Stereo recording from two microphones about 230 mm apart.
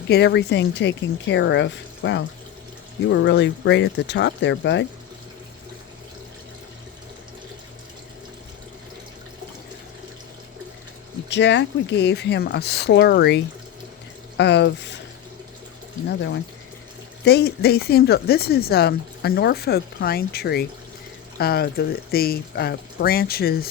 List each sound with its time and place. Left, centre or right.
0.1 s speech: left
11.3 s speech: left
16.0 s speech: left